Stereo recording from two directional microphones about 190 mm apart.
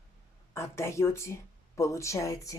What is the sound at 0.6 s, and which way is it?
Speech, 15° left (ahead or behind).